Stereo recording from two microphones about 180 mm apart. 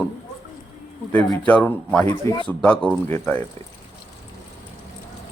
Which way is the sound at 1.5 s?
5° left (ahead or behind).